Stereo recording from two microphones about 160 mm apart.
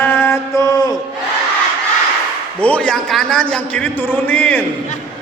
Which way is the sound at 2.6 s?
10° left (ahead or behind).